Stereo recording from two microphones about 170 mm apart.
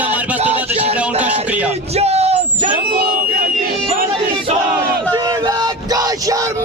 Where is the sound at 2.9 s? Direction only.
60° right (ahead or behind).